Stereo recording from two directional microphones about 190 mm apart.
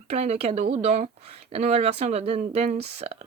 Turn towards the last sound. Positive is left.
turn(degrees=-35)  # may be behind; listen again after turning